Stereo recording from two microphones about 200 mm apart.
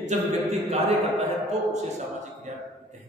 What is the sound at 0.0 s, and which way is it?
Speech, 35° right (ahead or behind).